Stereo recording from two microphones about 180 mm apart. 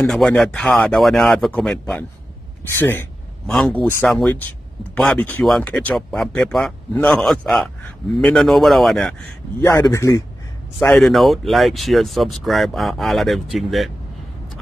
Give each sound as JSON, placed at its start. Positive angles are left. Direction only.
{"t": 0.0, "sound": "speech", "side_deg": 5}
{"t": 9.6, "sound": "a man's voice", "side_deg": 15}
{"t": 10.8, "sound": "speech", "side_deg": 5}